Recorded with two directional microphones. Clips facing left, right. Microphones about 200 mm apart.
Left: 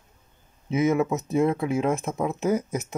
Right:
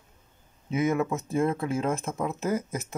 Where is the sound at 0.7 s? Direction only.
20° left (ahead or behind).